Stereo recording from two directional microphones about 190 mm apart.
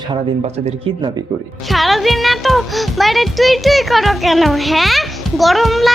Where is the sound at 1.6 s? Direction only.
Centre (ahead or behind).